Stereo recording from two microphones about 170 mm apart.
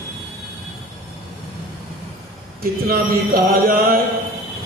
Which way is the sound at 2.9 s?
60° right (ahead or behind).